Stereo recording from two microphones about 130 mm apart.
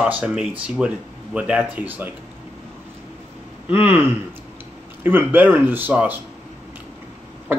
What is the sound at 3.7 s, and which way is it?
Speech, 15° right (ahead or behind).